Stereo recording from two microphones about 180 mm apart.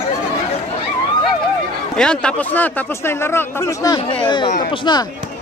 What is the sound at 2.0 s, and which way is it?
Speech, 5° left (ahead or behind).